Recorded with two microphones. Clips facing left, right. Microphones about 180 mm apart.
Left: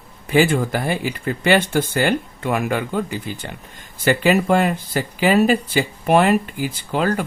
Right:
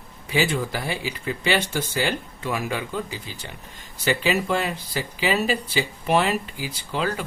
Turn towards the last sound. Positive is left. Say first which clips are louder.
# left 6 dB
turn(degrees=55)  # may be behind; listen again after turning